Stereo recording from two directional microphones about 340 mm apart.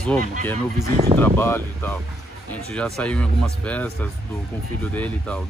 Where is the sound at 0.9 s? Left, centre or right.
Centre.